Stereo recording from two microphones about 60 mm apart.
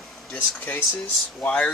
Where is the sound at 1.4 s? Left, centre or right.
Left.